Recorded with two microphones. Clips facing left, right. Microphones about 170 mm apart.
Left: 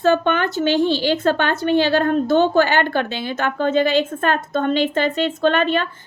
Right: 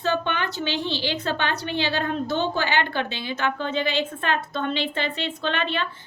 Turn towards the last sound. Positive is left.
turn(degrees=45)  # may be behind; listen again after turning